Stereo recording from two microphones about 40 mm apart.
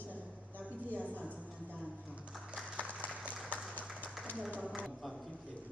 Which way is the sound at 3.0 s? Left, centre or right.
Right.